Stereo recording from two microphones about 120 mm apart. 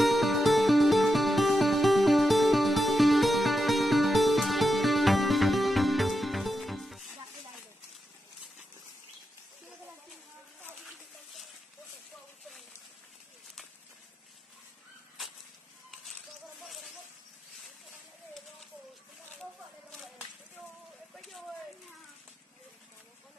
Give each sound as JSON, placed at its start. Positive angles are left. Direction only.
{"t": 0.0, "sound": "music", "side_deg": 0}
{"t": 16.6, "sound": "snake", "side_deg": 0}
{"t": 21.2, "sound": "a sound", "side_deg": 0}